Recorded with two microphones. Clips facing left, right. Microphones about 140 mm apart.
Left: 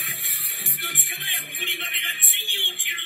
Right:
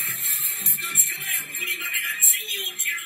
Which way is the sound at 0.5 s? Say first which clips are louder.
Left 2 dB; 25° right (ahead or behind).